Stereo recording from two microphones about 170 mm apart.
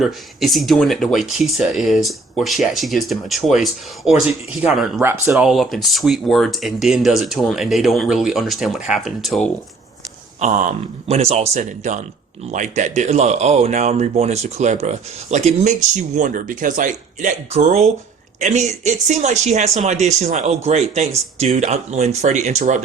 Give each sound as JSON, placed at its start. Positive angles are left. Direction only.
{"t": 0.0, "sound": "speech", "side_deg": 0}
{"t": 10.4, "sound": "speech", "side_deg": -50}
{"t": 16.1, "sound": "speech", "side_deg": -50}